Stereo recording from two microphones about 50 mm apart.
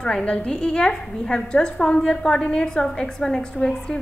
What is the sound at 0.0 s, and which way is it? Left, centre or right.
A woman's voice, centre.